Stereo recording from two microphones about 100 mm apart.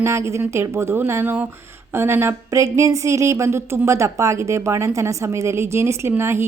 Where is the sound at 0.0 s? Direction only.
30° right (ahead or behind).